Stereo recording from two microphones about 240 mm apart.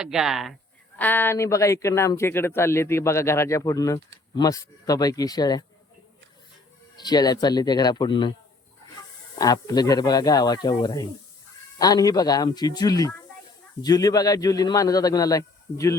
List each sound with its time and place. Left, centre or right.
0.0 s speech: centre
7.0 s speech: centre
9.4 s speech: centre